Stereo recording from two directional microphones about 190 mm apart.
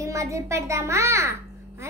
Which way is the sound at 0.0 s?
15° right (ahead or behind).